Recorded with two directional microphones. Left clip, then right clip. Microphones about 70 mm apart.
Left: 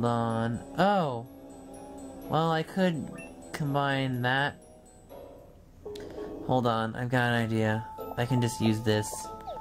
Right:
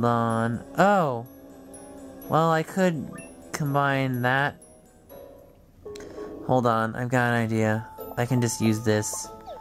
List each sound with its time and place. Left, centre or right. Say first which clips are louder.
0.0 s music: right 5 dB; right
1.8 s music: right 1 dB; right
2.3 s speech: right 6 dB; right
3.8 s music: right 5 dB; right
5.9 s speech: right 2 dB; right
8.1 s music: right 4 dB; right